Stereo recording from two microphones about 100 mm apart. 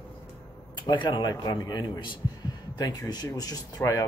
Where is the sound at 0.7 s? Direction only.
55° left (ahead or behind).